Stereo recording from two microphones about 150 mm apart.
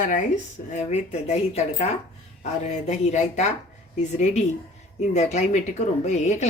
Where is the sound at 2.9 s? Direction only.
50° left (ahead or behind).